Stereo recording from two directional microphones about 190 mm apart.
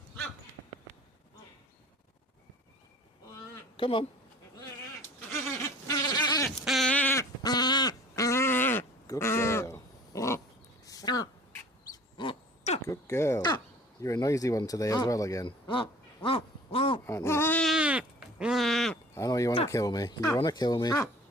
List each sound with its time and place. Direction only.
3.8 s speech: 25° left (ahead or behind)
5.9 s goat: 20° left (ahead or behind)
6.7 s a sound: centre (ahead or behind); by 12.8 s 30° left (ahead or behind)
12.9 s speech: 15° left (ahead or behind)
17.1 s sheep: 15° left (ahead or behind)
19.1 s speech: 15° left (ahead or behind)